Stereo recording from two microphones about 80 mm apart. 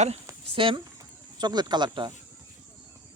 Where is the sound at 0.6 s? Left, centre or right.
Right.